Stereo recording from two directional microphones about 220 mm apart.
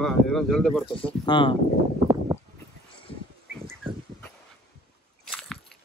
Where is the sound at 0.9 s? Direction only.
25° left (ahead or behind).